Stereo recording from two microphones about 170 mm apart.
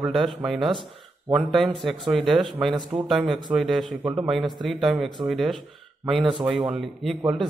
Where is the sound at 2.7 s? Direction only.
30° right (ahead or behind).